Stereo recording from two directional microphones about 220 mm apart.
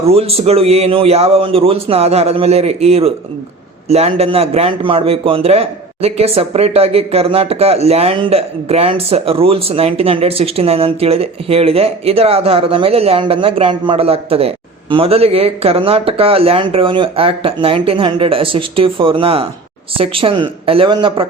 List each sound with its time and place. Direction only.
0.0 s a man's voice: 25° right (ahead or behind)